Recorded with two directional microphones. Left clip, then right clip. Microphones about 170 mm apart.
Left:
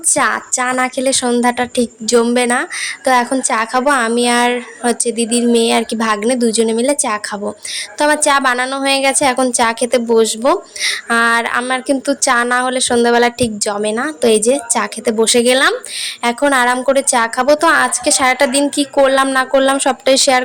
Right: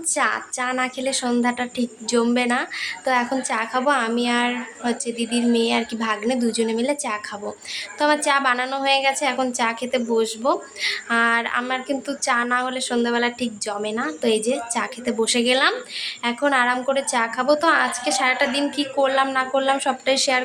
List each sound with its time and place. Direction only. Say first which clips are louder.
0.1 s a woman's voice: left 7 dB; 35° left (ahead or behind)